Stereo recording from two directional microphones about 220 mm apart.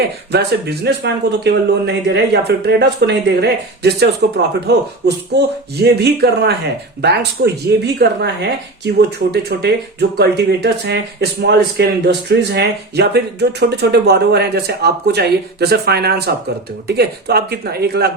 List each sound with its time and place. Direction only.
0.9 s speech: 50° right (ahead or behind)